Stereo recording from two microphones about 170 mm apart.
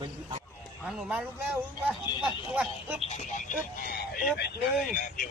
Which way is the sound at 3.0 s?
40° left (ahead or behind).